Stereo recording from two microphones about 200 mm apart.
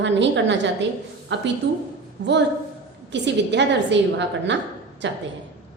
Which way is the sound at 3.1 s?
60° right (ahead or behind).